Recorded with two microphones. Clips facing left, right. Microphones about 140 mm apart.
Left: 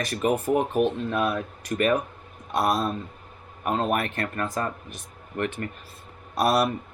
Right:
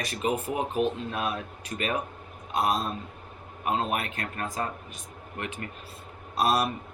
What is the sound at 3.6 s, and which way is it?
Speech, 50° left (ahead or behind).